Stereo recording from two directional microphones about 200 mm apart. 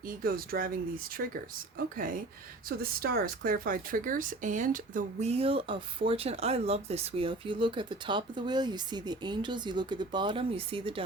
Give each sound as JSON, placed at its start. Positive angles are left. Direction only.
{"t": 0.0, "sound": "speech", "side_deg": -45}
{"t": 2.6, "sound": "speech", "side_deg": -50}